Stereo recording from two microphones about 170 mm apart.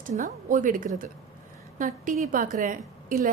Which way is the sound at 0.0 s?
45° right (ahead or behind).